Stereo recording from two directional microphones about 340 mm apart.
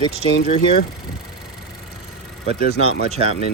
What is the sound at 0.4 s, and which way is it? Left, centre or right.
Speech, centre.